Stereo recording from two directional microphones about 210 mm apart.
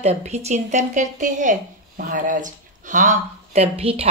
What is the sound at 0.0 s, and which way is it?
A woman's voice, 30° right (ahead or behind).